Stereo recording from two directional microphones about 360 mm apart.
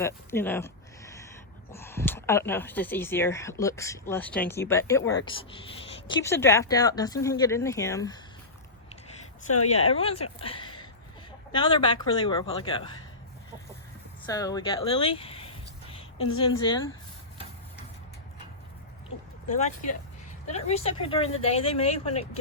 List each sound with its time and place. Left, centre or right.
0.0 s speech: centre
9.9 s speech: centre
14.3 s speech: centre
19.5 s speech: centre